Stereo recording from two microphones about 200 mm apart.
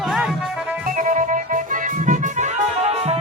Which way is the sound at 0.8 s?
40° right (ahead or behind).